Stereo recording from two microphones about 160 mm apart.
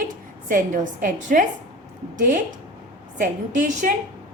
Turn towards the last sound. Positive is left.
turn(degrees=-55)  # may be behind; listen again after turning